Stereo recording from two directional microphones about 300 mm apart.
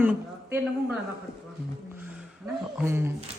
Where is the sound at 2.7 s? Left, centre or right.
Centre.